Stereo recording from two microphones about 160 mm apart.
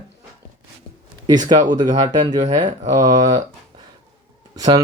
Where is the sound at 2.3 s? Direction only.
25° right (ahead or behind).